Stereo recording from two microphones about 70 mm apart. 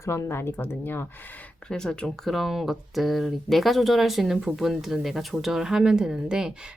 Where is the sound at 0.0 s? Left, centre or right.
Left.